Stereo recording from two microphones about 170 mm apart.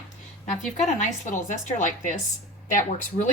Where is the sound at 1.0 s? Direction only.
45° left (ahead or behind).